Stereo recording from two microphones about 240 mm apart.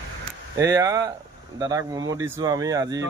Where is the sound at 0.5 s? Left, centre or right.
Centre.